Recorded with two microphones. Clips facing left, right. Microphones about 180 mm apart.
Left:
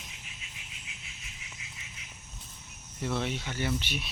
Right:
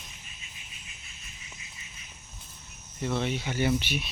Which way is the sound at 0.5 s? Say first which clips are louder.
Left 1 dB; 85° left.